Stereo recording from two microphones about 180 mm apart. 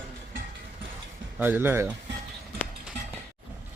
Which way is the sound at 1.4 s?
10° right (ahead or behind).